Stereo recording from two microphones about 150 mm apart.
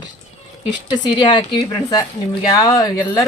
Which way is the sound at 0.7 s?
30° left (ahead or behind).